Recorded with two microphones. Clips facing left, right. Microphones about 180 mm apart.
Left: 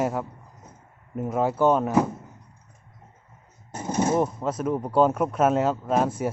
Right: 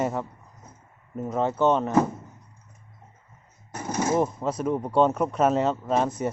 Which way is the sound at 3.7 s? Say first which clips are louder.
Left 2 dB; 25° left (ahead or behind).